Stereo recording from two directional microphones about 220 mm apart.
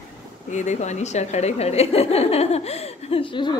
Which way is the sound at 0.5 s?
30° left (ahead or behind).